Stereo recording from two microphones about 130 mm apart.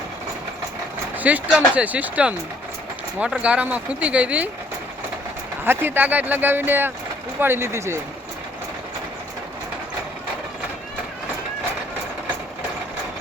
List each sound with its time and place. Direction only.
1.1 s a sound: 10° right (ahead or behind)
1.5 s speech: 10° right (ahead or behind)
5.6 s speech: 15° right (ahead or behind)